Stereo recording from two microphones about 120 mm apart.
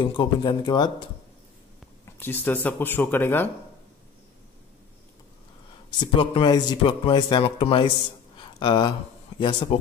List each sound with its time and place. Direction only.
0.0 s speech: 40° left (ahead or behind)
2.0 s speech: 20° left (ahead or behind)
5.9 s speech: 45° left (ahead or behind)
8.4 s a sound: 40° left (ahead or behind)
9.4 s speech: 45° left (ahead or behind)